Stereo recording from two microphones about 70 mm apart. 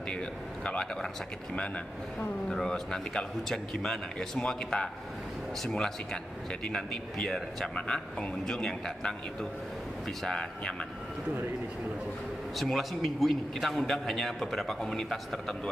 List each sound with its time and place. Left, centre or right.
0.7 s a man's voice: centre
12.5 s a man's voice: centre